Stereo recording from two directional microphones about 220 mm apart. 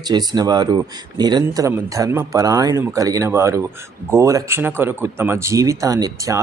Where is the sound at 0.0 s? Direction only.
20° right (ahead or behind).